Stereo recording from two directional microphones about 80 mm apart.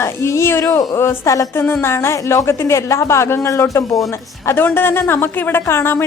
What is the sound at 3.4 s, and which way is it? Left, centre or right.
Speech, left.